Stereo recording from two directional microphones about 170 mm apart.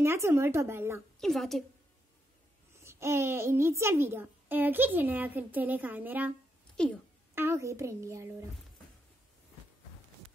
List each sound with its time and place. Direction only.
0.0 s a child's voice: 15° right (ahead or behind)
1.2 s a woman's voice: centre (ahead or behind)
2.8 s a child's voice: 15° right (ahead or behind)
6.8 s a woman's voice: 5° left (ahead or behind)
7.3 s a child's voice: 15° right (ahead or behind)